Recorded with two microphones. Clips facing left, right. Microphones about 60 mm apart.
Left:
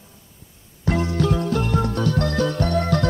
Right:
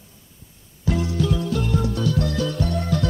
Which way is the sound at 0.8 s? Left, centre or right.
Left.